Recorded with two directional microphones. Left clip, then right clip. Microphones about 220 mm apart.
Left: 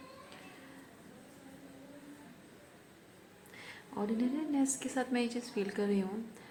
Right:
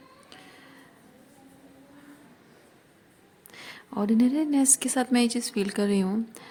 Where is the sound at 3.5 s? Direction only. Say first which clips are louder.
Right 8 dB; 50° right (ahead or behind).